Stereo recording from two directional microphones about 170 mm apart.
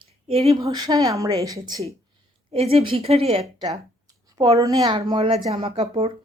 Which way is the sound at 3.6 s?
20° right (ahead or behind).